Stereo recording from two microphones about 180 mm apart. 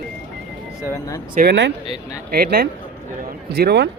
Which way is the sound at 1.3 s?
80° right.